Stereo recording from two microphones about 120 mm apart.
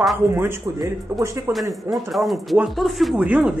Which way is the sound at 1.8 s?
Centre (ahead or behind).